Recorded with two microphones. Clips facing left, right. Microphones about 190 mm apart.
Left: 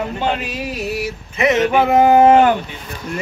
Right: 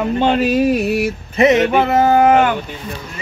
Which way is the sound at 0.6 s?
55° right (ahead or behind).